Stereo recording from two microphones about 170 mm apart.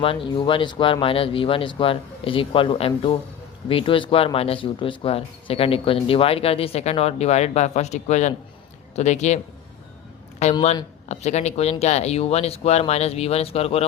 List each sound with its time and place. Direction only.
0.0 s speech: 30° left (ahead or behind)
10.4 s speech: 40° left (ahead or behind)